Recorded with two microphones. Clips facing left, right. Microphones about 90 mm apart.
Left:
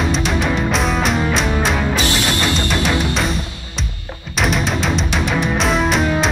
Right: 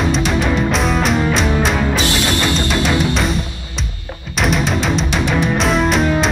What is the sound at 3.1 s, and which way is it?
Music, centre (ahead or behind).